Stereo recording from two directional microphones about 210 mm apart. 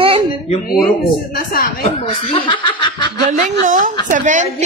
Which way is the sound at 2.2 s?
25° left (ahead or behind).